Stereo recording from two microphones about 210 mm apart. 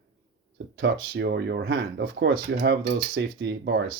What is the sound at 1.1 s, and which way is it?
Speech, 50° right (ahead or behind).